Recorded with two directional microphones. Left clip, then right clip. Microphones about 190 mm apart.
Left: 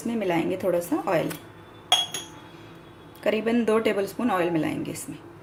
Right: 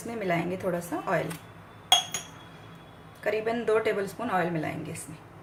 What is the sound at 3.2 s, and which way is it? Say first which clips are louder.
A woman's voice: left 4 dB; 30° left (ahead or behind).